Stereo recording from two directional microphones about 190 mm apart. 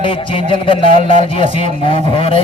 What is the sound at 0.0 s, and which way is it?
A man's voice, 30° left (ahead or behind).